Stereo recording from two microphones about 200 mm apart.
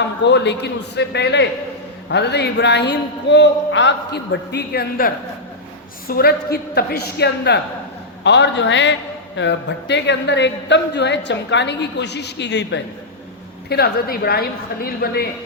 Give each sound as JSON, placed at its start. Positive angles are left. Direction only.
{"t": 0.3, "sound": "a man's voice", "side_deg": 60}